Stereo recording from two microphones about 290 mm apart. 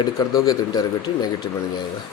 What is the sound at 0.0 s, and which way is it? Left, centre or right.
Speech, centre.